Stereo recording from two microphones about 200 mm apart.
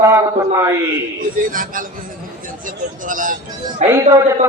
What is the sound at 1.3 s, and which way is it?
Speech, 40° right (ahead or behind).